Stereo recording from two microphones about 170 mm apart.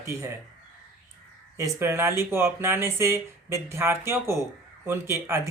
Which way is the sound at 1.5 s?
15° right (ahead or behind).